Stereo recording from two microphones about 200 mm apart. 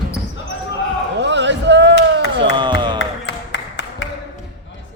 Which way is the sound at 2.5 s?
25° right (ahead or behind).